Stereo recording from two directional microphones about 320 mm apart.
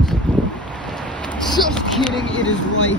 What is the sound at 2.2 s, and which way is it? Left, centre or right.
Speech, left.